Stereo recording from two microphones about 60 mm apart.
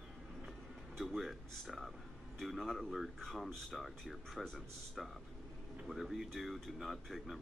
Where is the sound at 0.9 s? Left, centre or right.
Centre.